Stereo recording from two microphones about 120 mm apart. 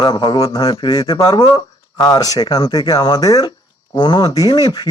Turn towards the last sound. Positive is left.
turn(degrees=35)  # may be behind; listen again after turning